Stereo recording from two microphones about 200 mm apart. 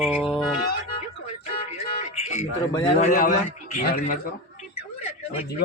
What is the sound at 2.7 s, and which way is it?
Speech, 20° left (ahead or behind).